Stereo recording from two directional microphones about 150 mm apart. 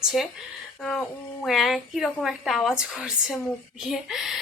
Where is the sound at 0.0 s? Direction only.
5° right (ahead or behind).